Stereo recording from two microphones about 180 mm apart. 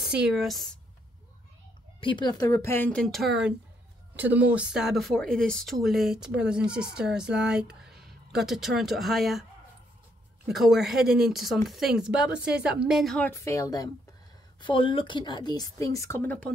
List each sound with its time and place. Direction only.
0.0 s speech: 5° right (ahead or behind)
2.0 s speech: 25° left (ahead or behind); by 13.3 s centre (ahead or behind)
13.3 s speech: 15° left (ahead or behind)
14.6 s a woman's voice: 30° left (ahead or behind); by 16.5 s 5° left (ahead or behind)